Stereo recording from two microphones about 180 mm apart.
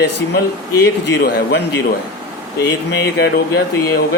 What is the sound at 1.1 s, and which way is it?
Speech, 70° left (ahead or behind).